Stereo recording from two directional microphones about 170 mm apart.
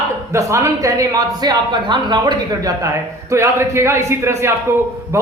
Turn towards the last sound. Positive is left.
turn(degrees=-15)  # may be behind; listen again after turning